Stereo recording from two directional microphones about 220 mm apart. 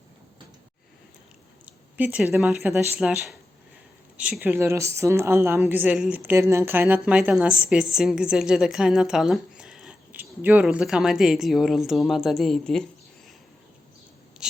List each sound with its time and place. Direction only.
1.6 s a woman's voice: 5° right (ahead or behind)